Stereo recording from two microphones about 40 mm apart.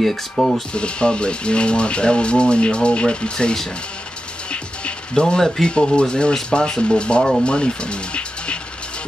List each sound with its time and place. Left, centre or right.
0.0 s speech: centre
0.7 s speech: left
4.5 s music: left
5.9 s speech: left